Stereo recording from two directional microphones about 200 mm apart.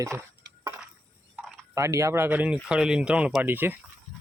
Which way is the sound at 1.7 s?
15° right (ahead or behind).